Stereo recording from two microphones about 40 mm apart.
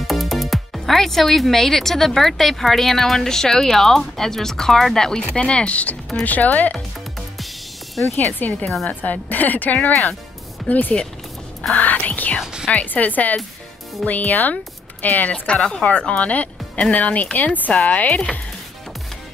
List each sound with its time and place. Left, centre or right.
0.0 s speech: centre; by 6.7 s left
8.2 s speech: left
15.3 s speech: left